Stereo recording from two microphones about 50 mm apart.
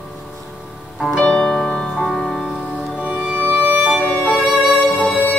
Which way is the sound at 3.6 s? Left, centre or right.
Right.